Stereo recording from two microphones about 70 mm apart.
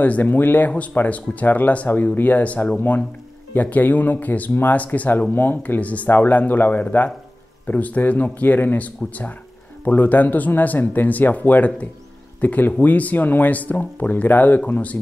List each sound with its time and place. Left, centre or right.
0.0 s speech: left